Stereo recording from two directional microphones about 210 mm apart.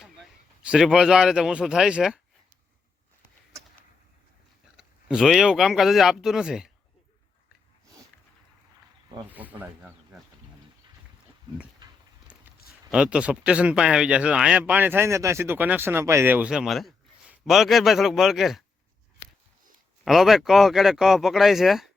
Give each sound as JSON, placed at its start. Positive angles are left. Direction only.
{"t": 0.6, "sound": "speech", "side_deg": -5}
{"t": 4.8, "sound": "speech", "side_deg": -5}
{"t": 9.3, "sound": "speech", "side_deg": -10}
{"t": 12.9, "sound": "speech", "side_deg": -5}
{"t": 20.1, "sound": "speech", "side_deg": 0}